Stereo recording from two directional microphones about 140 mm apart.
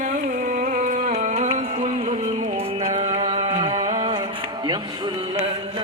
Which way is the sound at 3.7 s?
50° right (ahead or behind).